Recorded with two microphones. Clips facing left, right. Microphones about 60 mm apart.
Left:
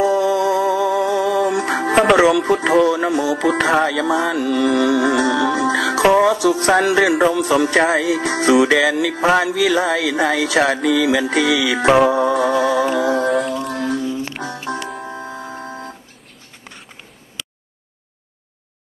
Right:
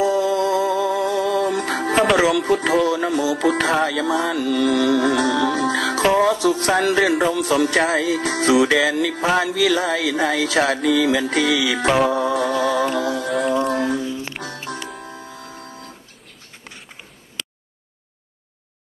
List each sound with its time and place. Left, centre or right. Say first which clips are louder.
0.0 s music: left 2 dB; centre
13.8 s music: left 1 dB; centre
15.0 s music: left 7 dB; left